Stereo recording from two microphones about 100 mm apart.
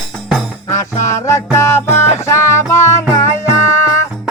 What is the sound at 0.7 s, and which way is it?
Music, 30° left (ahead or behind).